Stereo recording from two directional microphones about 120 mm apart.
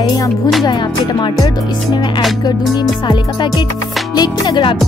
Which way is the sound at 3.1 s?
40° left (ahead or behind).